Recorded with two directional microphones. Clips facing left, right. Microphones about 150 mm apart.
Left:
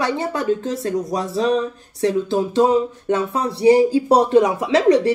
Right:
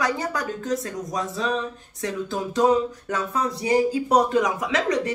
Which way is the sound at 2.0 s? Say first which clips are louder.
Left 9 dB; 30° left (ahead or behind).